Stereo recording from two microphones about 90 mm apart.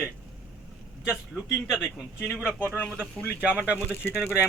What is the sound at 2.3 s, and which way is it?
Speech, 10° left (ahead or behind).